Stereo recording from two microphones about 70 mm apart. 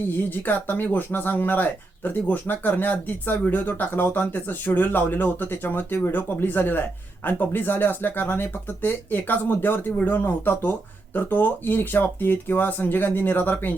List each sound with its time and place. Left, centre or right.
0.1 s speech: left